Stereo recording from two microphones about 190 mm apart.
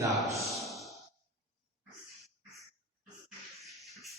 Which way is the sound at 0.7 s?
Centre (ahead or behind).